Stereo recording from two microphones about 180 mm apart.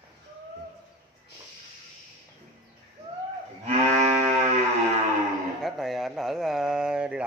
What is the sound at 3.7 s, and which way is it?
Moo, 40° right (ahead or behind).